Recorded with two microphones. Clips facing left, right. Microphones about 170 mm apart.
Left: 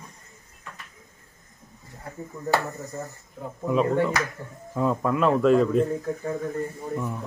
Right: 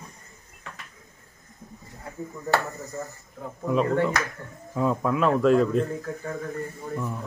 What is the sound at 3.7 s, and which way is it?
A man's voice, 5° left (ahead or behind).